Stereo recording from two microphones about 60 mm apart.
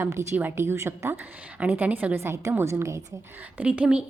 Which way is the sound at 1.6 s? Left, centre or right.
Right.